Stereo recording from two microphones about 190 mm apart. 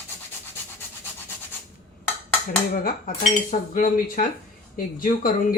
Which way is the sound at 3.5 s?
45° left (ahead or behind).